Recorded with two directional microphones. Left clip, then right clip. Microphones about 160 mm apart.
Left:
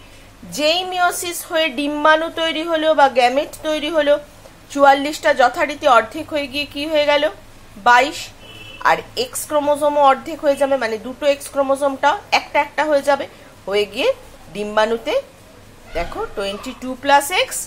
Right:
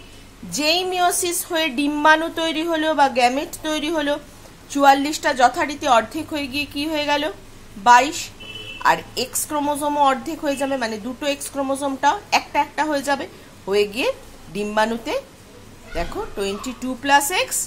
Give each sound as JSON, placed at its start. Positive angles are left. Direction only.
{"t": 0.5, "sound": "a woman's voice", "side_deg": -15}